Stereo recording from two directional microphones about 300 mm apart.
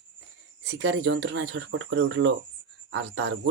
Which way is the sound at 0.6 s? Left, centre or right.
Right.